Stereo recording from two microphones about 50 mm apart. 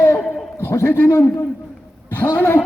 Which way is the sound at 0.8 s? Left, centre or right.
Left.